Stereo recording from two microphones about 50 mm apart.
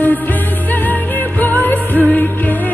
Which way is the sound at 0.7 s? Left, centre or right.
Left.